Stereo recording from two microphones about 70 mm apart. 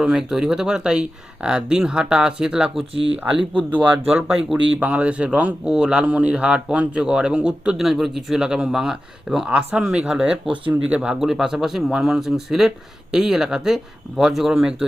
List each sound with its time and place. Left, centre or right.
0.0 s speech: centre